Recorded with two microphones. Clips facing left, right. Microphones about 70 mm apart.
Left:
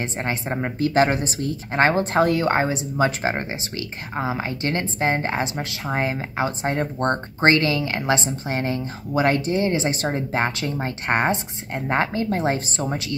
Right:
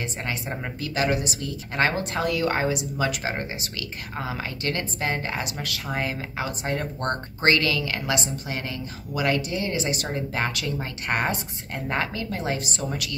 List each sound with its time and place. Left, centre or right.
0.0 s a woman's voice: left